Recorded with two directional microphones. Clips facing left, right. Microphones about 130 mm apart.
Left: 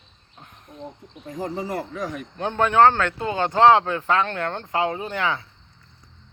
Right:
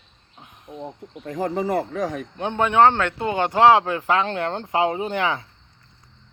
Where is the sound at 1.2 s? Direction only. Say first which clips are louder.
Right 5 dB; 65° right (ahead or behind).